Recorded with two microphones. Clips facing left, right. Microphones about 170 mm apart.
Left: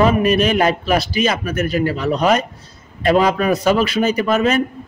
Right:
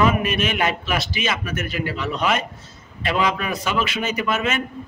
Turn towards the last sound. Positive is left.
turn(degrees=35)  # may be behind; listen again after turning